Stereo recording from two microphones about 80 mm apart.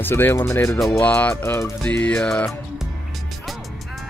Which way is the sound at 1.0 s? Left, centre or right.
Left.